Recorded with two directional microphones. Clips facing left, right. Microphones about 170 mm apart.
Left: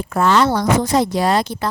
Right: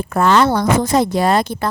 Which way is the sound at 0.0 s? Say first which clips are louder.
Right 2 dB; 55° right (ahead or behind).